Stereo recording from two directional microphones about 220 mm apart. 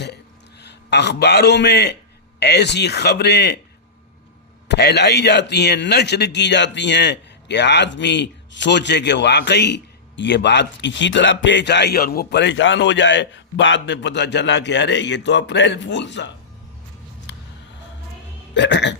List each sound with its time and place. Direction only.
0.6 s a man's voice: 50° left (ahead or behind)
4.7 s a man's voice: 50° left (ahead or behind)
17.3 s music: 55° left (ahead or behind)
18.5 s a man's voice: 50° left (ahead or behind)